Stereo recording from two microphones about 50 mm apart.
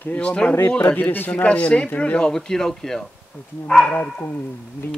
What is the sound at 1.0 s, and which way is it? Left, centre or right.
Speech, left.